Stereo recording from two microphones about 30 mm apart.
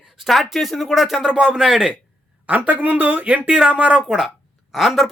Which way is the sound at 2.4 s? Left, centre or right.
Right.